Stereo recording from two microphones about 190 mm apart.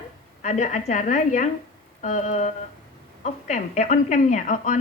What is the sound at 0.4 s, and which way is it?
A woman's voice, 40° left (ahead or behind).